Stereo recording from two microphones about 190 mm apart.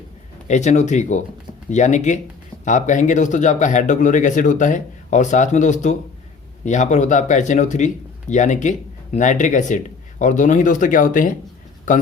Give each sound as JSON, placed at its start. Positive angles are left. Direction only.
{"t": 0.4, "sound": "speech", "side_deg": 40}